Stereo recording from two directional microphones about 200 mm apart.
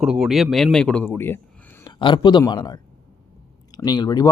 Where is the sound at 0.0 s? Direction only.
Centre (ahead or behind).